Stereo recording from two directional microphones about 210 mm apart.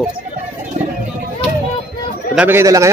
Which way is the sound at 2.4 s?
10° right (ahead or behind).